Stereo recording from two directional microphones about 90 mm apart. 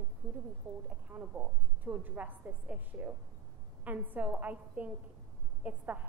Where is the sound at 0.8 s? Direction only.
20° right (ahead or behind).